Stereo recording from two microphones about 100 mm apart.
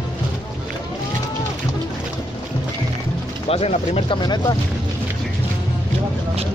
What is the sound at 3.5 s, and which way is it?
Speech, 85° left.